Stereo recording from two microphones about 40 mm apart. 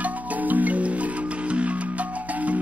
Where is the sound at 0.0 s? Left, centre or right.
Right.